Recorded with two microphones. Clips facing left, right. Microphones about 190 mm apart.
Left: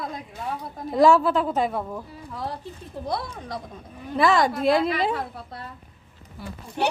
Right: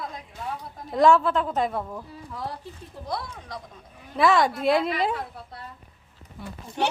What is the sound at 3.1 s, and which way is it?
Speech, 30° left (ahead or behind).